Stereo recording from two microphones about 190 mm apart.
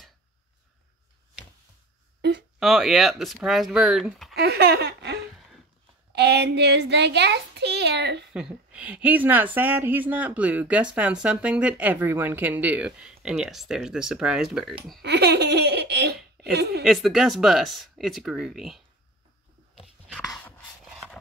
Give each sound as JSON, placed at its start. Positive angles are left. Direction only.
{"t": 2.6, "sound": "speech", "side_deg": 0}
{"t": 4.4, "sound": "giggle", "side_deg": -55}
{"t": 6.1, "sound": "a child's voice", "side_deg": -60}
{"t": 8.3, "sound": "speech", "side_deg": -5}
{"t": 15.0, "sound": "laughter", "side_deg": -60}
{"t": 16.8, "sound": "speech", "side_deg": 0}
{"t": 19.7, "sound": "a sound", "side_deg": -5}
{"t": 20.8, "sound": "wood", "side_deg": 0}